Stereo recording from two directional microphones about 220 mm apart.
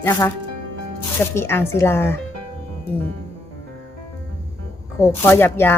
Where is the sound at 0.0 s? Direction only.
10° left (ahead or behind).